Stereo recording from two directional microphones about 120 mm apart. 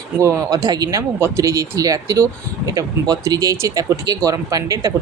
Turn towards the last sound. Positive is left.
turn(degrees=-30)  # may be behind; listen again after turning